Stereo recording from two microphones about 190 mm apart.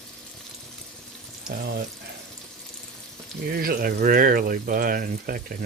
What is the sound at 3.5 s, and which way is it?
Speech, 50° right (ahead or behind).